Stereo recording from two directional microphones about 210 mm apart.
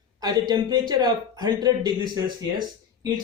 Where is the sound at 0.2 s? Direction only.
20° right (ahead or behind).